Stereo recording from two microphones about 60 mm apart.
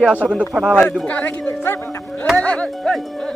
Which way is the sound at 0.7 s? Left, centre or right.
Centre.